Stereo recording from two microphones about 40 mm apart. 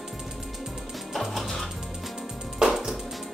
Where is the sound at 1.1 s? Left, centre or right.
Centre.